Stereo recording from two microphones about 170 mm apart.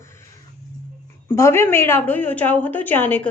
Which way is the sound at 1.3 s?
15° left (ahead or behind).